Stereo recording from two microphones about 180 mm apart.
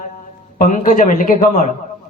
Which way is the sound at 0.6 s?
45° left (ahead or behind).